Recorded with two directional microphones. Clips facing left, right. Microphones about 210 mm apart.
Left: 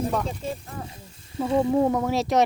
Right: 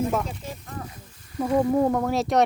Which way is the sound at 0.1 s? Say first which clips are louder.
Even; centre (ahead or behind).